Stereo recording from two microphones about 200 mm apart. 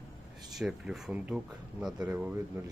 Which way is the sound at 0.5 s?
5° right (ahead or behind).